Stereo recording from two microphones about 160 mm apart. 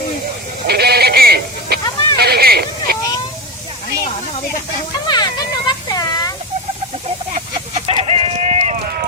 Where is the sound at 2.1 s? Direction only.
85° right.